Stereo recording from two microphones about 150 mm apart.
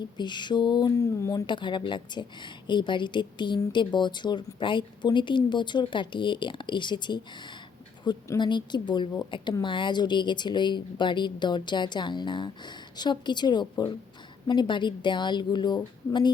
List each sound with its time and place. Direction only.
0.2 s speech: 30° left (ahead or behind)